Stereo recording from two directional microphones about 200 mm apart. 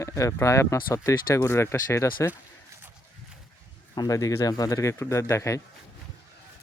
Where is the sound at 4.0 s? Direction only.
15° left (ahead or behind).